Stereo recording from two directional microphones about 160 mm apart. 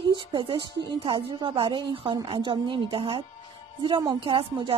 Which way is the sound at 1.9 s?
35° right (ahead or behind).